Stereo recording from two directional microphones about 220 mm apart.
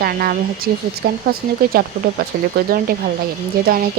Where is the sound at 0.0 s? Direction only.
40° right (ahead or behind).